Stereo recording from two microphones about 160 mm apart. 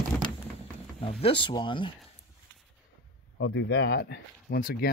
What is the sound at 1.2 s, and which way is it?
Speech, 30° left (ahead or behind).